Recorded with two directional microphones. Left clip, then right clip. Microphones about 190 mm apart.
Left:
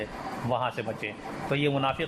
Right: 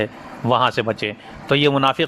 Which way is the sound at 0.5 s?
45° right (ahead or behind).